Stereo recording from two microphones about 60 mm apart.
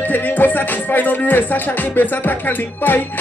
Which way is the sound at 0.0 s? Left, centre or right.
Left.